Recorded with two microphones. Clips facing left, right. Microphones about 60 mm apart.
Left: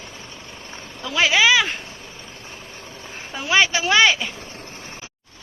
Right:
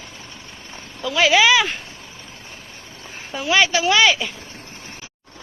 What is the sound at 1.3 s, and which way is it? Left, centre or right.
Speech, centre.